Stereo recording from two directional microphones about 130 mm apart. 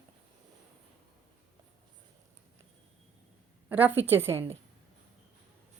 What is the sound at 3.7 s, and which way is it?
Speech, 15° right (ahead or behind).